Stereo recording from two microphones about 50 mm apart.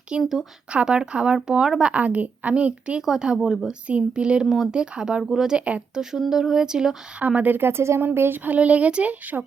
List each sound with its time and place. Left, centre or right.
0.2 s speech: centre
0.7 s speech: right
1.9 s a woman's voice: right
3.1 s speech: centre
3.7 s a woman's voice: right
4.4 s speech: centre
7.2 s speech: right
7.6 s speech: right
8.4 s a woman's voice: right